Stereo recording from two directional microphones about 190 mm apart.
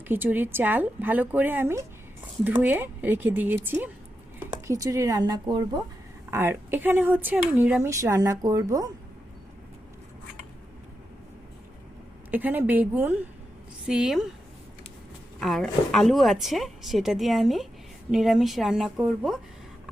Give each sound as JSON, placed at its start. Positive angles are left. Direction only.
{"t": 0.1, "sound": "speech", "side_deg": -10}
{"t": 6.3, "sound": "speech", "side_deg": -10}
{"t": 12.3, "sound": "speech", "side_deg": -10}
{"t": 15.4, "sound": "speech", "side_deg": 0}